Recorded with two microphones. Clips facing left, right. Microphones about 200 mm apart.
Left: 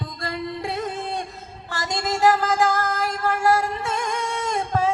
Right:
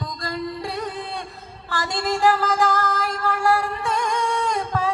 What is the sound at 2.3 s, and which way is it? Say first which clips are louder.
Music: even; 25° left (ahead or behind).